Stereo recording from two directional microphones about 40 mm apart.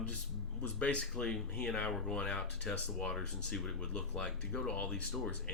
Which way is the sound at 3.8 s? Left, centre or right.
Centre.